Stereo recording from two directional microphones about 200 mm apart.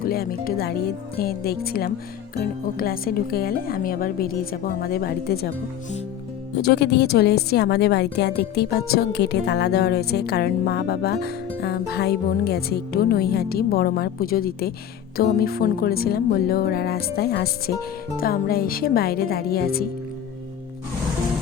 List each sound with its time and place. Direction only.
0.0 s a woman's voice: 50° left (ahead or behind)
6.6 s a woman's voice: 55° left (ahead or behind)